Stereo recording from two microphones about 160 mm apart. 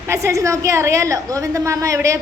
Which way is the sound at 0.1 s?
20° right (ahead or behind).